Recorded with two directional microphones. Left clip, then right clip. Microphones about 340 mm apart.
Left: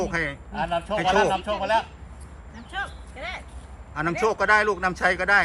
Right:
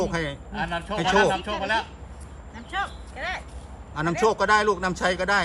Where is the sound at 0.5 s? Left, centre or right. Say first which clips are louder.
Left 3 dB; left.